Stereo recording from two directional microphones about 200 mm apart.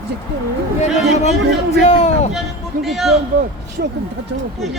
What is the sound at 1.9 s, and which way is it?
Speech, 35° left (ahead or behind).